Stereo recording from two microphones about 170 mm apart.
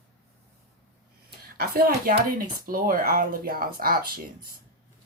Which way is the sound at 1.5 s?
60° right (ahead or behind).